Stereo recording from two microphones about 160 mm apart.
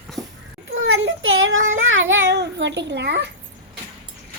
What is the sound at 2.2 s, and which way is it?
A child's voice, 90° right.